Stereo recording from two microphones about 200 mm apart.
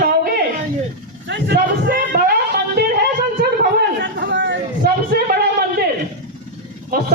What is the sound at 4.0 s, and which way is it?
Chatter, 65° right (ahead or behind).